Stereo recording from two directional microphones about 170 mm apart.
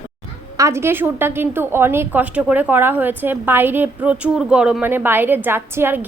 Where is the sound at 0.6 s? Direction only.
15° right (ahead or behind).